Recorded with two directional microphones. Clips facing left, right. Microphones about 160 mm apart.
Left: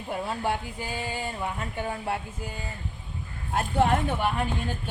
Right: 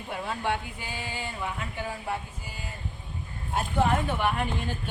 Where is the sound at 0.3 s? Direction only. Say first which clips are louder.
Right 2 dB; 40° left (ahead or behind).